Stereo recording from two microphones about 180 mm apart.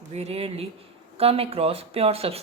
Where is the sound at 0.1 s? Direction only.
35° right (ahead or behind).